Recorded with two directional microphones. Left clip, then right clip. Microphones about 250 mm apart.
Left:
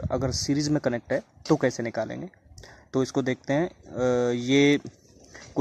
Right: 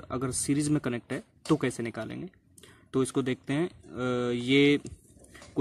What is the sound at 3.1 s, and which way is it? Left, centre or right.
Speech, centre.